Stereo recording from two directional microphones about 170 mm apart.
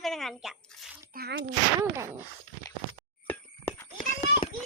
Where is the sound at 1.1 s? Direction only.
80° right.